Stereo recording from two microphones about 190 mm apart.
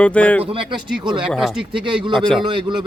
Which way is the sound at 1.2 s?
Centre (ahead or behind).